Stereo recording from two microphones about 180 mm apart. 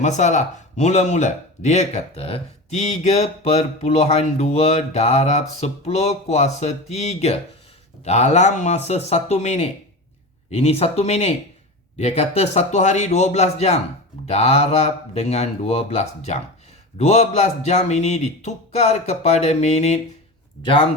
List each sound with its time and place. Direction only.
0.0 s speech: 40° left (ahead or behind)